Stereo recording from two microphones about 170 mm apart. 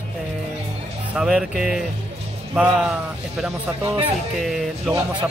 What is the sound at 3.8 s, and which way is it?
Speech, 30° right (ahead or behind).